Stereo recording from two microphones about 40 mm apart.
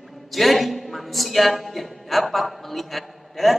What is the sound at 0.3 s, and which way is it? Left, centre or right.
A man's voice, centre.